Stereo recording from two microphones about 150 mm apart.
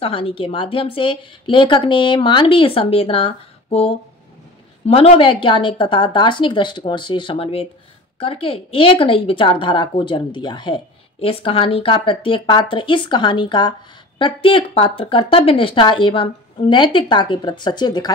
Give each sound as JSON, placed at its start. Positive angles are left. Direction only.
{"t": 0.0, "sound": "a woman's voice", "side_deg": 40}